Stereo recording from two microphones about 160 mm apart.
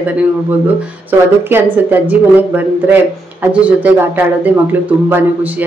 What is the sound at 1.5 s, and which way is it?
A man's voice, 10° right (ahead or behind).